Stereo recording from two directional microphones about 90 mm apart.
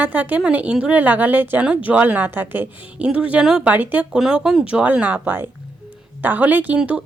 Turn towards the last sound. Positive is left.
turn(degrees=-10)  # may be behind; listen again after turning